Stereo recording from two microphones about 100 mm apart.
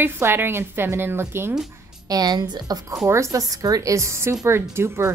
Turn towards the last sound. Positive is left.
turn(degrees=-25)  # may be behind; listen again after turning